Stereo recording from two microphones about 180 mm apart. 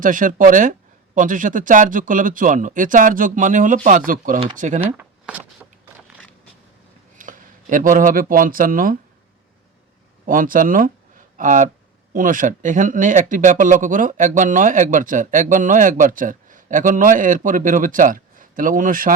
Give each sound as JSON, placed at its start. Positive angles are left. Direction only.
{"t": 0.0, "sound": "speech", "side_deg": -50}
{"t": 4.9, "sound": "a sound", "side_deg": -10}
{"t": 7.2, "sound": "speech", "side_deg": -45}
{"t": 10.2, "sound": "speech", "side_deg": -50}